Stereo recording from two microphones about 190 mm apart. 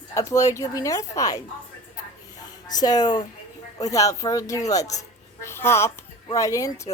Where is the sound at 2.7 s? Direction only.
20° left (ahead or behind).